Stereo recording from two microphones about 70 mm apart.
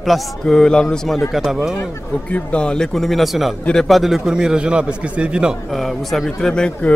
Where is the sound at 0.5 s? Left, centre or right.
Centre.